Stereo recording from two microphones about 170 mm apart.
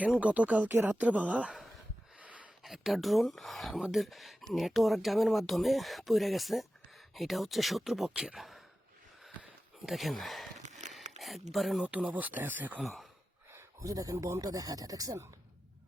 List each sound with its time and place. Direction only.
0.0 s a woman's voice: 10° right (ahead or behind)
9.2 s a sound: centre (ahead or behind)
10.6 s a sound: 45° right (ahead or behind)
11.2 s a woman's voice: centre (ahead or behind)
12.8 s speech: centre (ahead or behind)
13.5 s speech: 15° right (ahead or behind)